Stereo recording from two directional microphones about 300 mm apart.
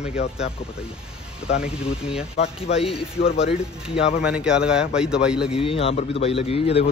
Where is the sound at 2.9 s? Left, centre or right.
Centre.